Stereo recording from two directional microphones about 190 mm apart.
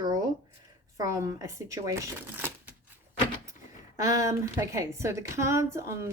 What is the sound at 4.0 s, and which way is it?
A woman's voice, 15° right (ahead or behind).